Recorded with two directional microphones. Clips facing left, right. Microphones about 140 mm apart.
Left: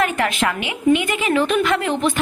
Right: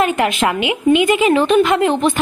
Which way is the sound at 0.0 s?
20° right (ahead or behind).